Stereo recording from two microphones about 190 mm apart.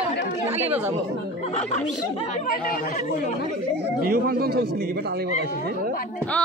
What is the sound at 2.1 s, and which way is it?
A woman's voice, 40° left (ahead or behind).